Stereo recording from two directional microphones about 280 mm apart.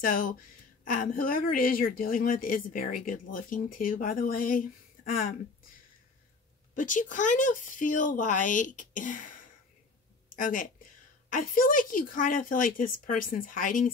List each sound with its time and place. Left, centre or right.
0.0 s a woman's voice: left
6.7 s a woman's voice: left